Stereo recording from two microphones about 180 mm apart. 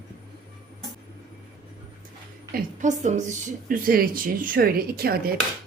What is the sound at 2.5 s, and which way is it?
A woman's voice, 45° right (ahead or behind).